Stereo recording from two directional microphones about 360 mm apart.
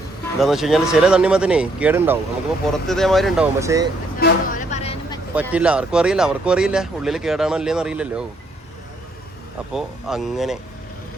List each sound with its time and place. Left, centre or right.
0.3 s speech: centre
4.2 s a sound: left
5.3 s speech: centre
9.7 s speech: centre